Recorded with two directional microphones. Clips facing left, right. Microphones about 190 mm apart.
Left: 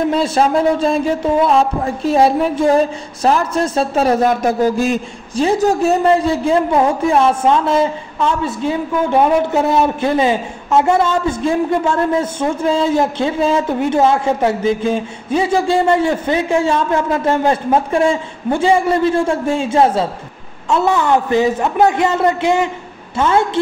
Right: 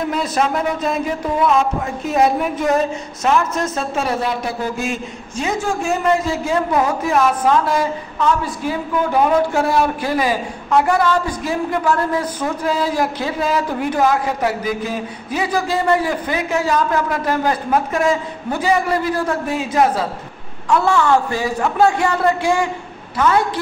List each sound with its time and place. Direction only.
0.1 s a man's voice: 30° left (ahead or behind)